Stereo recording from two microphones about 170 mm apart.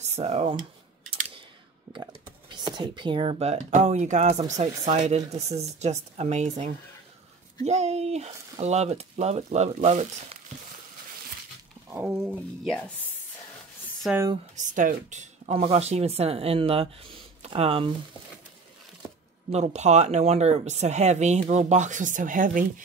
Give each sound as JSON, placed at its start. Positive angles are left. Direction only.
{"t": 0.0, "sound": "speech", "side_deg": -40}
{"t": 1.9, "sound": "a sound", "side_deg": -20}
{"t": 2.5, "sound": "speech", "side_deg": -25}
{"t": 11.9, "sound": "speech", "side_deg": -10}
{"t": 12.2, "sound": "speech", "side_deg": 0}
{"t": 14.6, "sound": "speech", "side_deg": -50}
{"t": 19.5, "sound": "speech", "side_deg": -40}